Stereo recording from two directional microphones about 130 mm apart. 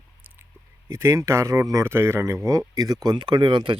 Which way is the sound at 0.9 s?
20° right (ahead or behind).